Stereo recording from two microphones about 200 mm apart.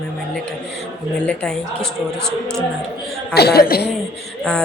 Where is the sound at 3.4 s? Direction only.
55° left (ahead or behind).